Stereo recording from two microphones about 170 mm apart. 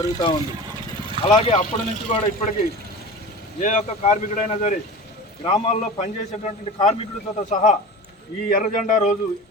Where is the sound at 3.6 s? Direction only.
45° left (ahead or behind).